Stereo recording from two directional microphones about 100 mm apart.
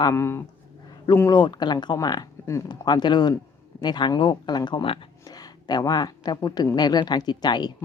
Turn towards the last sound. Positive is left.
turn(degrees=45)  # may be behind; listen again after turning